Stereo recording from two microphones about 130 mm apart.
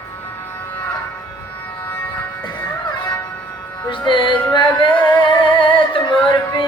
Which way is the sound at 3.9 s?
40° left (ahead or behind).